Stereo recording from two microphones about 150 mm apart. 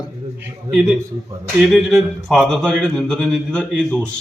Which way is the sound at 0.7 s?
Centre (ahead or behind).